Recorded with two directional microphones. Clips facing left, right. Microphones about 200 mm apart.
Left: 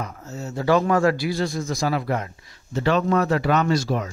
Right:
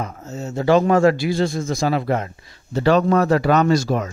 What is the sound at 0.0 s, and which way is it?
Speech, 20° right (ahead or behind).